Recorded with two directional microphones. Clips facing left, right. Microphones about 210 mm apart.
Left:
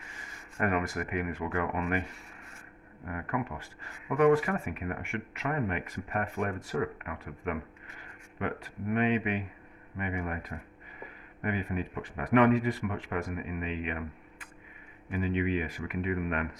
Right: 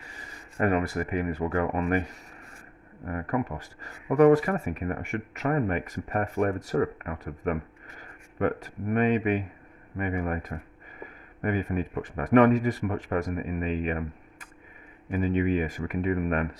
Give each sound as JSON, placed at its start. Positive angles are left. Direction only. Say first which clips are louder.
{"t": 0.1, "sound": "speech", "louder": "right 3 dB", "side_deg": -35}
{"t": 15.1, "sound": "speech", "louder": "right 5 dB", "side_deg": -45}